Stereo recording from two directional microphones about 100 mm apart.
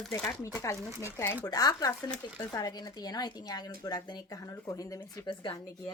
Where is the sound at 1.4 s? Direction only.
40° left (ahead or behind).